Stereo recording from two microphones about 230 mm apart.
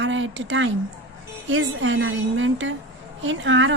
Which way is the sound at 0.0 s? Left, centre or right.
Right.